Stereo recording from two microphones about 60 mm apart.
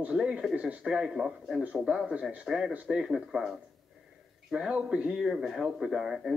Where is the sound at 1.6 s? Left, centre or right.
Right.